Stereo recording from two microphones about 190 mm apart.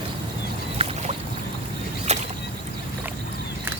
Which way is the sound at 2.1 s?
35° right (ahead or behind).